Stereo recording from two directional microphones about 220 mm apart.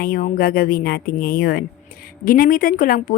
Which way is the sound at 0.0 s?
40° left (ahead or behind).